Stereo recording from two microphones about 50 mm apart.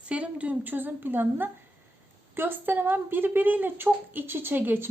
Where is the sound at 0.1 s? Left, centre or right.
Right.